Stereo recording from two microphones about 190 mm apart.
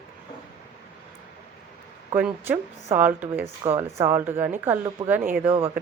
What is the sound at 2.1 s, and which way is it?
A woman's voice, 10° right (ahead or behind).